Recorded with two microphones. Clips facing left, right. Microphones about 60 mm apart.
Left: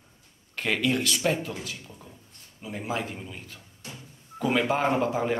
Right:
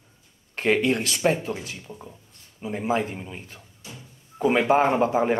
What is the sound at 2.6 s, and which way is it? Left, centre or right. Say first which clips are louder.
A man's voice: right 6 dB; right.